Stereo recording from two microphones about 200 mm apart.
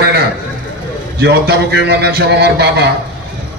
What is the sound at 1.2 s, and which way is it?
A man's voice, 55° right (ahead or behind).